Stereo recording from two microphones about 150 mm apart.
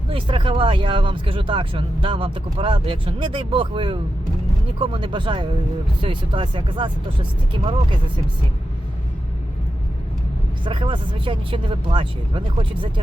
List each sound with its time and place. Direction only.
0.1 s speech: 35° right (ahead or behind)
10.6 s speech: 35° right (ahead or behind)